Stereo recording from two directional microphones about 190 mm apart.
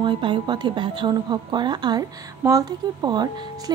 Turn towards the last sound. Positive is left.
turn(degrees=-20)  # may be behind; listen again after turning